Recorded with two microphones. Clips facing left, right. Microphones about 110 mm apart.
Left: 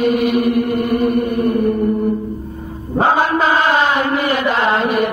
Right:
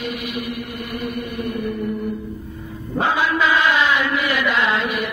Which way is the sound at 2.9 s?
40° left (ahead or behind).